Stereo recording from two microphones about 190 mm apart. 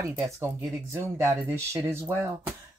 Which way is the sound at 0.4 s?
10° right (ahead or behind).